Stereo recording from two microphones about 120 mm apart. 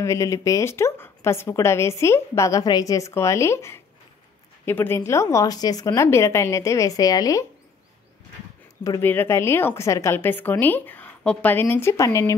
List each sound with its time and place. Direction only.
0.0 s a woman's voice: 25° left (ahead or behind)
9.0 s a woman's voice: 15° left (ahead or behind)